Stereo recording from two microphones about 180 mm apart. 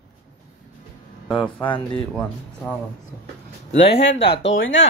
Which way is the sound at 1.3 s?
5° left (ahead or behind).